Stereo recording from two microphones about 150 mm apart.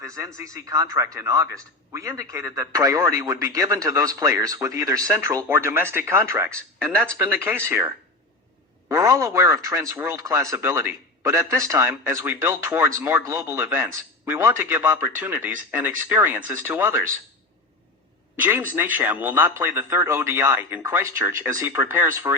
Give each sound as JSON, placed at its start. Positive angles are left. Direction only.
{"t": 0.0, "sound": "a man's voice", "side_deg": -20}
{"t": 18.8, "sound": "a man's voice", "side_deg": -10}